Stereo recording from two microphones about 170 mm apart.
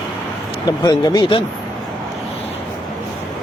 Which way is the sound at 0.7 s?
25° left (ahead or behind).